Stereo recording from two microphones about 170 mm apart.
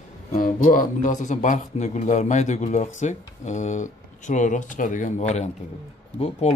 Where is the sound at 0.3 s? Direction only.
55° left (ahead or behind).